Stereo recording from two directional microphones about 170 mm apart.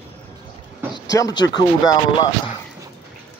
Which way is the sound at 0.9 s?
20° left (ahead or behind).